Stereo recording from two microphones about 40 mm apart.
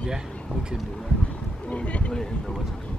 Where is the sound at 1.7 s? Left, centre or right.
Left.